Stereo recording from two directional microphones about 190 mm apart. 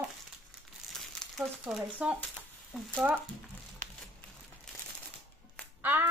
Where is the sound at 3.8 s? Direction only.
45° right (ahead or behind).